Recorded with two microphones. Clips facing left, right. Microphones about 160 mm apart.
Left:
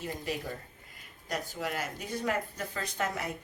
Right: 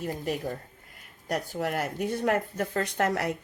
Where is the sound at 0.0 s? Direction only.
50° right (ahead or behind).